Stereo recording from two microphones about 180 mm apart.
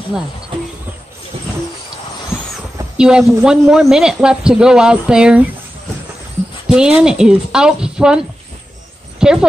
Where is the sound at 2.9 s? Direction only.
5° right (ahead or behind).